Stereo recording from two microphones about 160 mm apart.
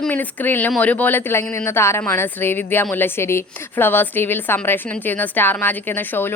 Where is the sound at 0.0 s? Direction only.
10° left (ahead or behind).